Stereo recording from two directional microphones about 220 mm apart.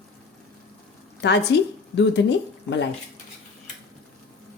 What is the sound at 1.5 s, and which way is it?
Speech, 50° left (ahead or behind).